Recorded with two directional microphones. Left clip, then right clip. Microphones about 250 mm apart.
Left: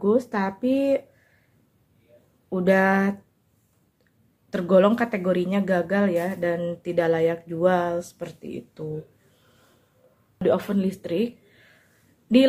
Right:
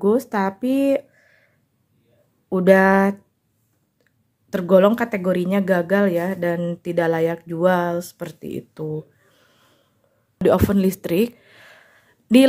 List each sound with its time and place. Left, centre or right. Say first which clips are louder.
0.0 s speech: right 3 dB; right
2.5 s speech: right 6 dB; right
4.5 s speech: right 3 dB; right
10.4 s speech: right 5 dB; right